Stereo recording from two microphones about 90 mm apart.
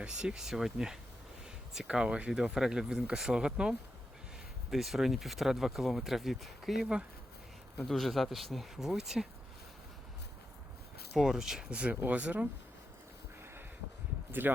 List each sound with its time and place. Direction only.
0.0 s speech: 10° right (ahead or behind)
11.1 s speech: 5° right (ahead or behind)
13.4 s a sound: 25° right (ahead or behind)
14.5 s speech: 20° right (ahead or behind)